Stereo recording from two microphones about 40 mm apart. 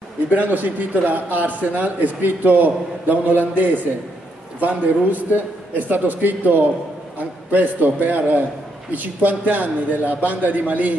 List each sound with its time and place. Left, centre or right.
0.3 s a man's voice: right